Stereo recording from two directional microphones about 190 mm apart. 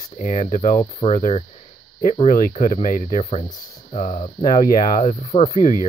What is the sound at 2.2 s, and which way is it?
Speech, 50° left (ahead or behind).